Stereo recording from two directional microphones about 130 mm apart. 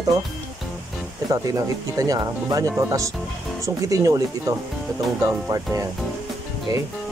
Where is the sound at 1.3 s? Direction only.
25° right (ahead or behind).